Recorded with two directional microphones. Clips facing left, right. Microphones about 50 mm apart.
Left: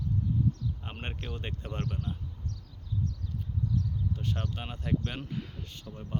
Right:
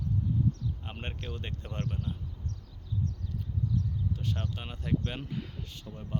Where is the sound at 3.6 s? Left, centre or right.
Centre.